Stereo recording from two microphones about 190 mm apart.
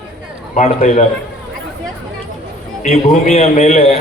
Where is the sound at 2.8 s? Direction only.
35° left (ahead or behind).